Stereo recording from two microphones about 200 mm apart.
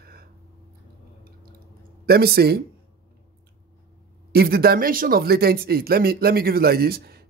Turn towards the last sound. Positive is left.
turn(degrees=-50)  # may be behind; listen again after turning